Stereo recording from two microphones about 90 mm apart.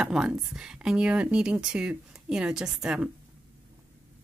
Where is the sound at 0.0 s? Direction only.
5° right (ahead or behind).